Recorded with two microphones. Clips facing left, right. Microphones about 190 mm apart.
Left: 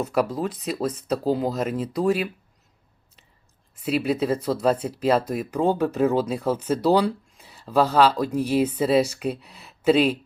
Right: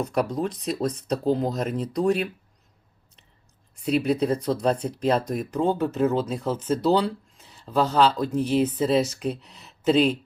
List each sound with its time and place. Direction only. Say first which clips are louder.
0.0 s speech: left 1 dB; 5° left (ahead or behind)
3.8 s speech: even; 5° left (ahead or behind)